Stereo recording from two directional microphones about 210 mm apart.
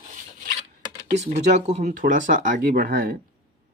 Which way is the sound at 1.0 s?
30° right (ahead or behind).